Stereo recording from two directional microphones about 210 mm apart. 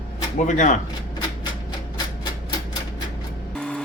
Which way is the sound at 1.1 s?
20° left (ahead or behind).